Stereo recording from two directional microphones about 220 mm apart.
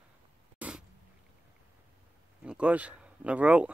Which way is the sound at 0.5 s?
5° right (ahead or behind).